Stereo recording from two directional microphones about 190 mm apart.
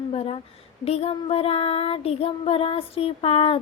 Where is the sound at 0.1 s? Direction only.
30° left (ahead or behind).